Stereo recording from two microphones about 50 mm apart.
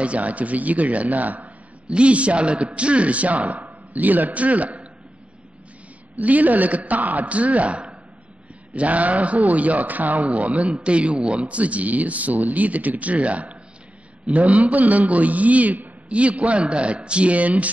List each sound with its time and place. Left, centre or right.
0.0 s a man's voice: right
6.1 s a man's voice: right